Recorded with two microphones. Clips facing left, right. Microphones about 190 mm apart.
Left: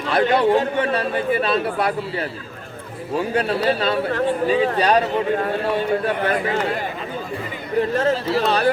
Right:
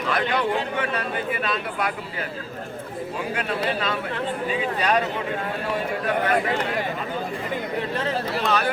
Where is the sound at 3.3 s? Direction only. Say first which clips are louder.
Left 6 dB; 35° left (ahead or behind).